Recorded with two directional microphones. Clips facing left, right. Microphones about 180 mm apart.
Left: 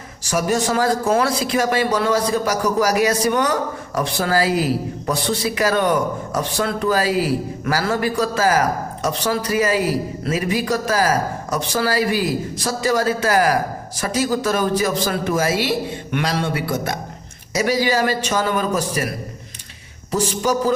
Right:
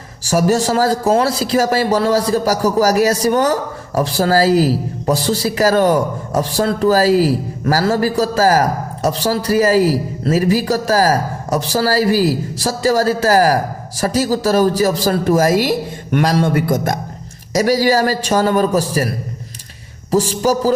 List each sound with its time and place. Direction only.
0.3 s a man's voice: 35° right (ahead or behind)